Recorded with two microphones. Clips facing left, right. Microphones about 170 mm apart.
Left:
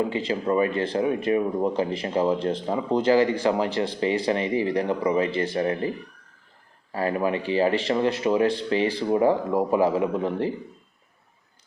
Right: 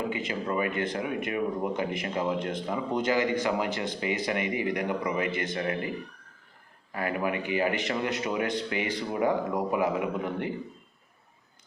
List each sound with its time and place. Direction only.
0.1 s speech: 30° left (ahead or behind)
6.9 s speech: 30° left (ahead or behind)